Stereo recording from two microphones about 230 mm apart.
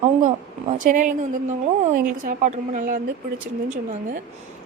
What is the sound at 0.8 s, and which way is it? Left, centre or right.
A woman's voice, right.